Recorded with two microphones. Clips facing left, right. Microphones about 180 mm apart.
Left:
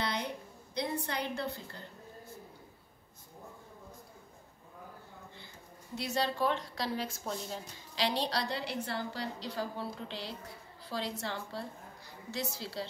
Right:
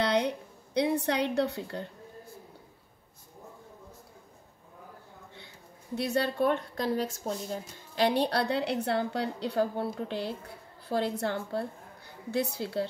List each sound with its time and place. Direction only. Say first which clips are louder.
0.0 s a sound: right 9 dB; 65° right (ahead or behind)
0.7 s a woman's voice: right 8 dB; 70° right (ahead or behind)
5.9 s a woman's voice: right 5 dB; 60° right (ahead or behind)